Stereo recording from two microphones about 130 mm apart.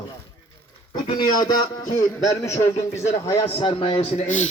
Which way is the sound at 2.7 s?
55° left (ahead or behind).